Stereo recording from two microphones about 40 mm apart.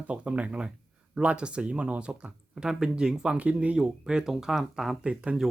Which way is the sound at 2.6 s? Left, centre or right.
Centre.